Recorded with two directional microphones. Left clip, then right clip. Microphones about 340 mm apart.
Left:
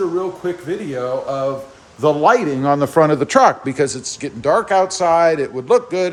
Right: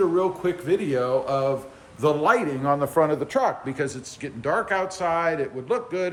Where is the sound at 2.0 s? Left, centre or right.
Centre.